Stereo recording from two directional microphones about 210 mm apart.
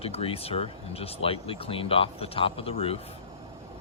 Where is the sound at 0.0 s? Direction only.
25° left (ahead or behind).